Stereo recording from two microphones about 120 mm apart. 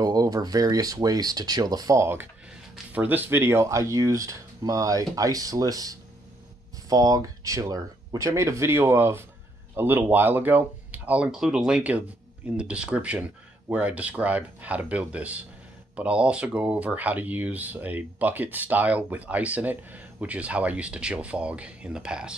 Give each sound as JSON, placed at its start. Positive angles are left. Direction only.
{"t": 0.0, "sound": "speech", "side_deg": -30}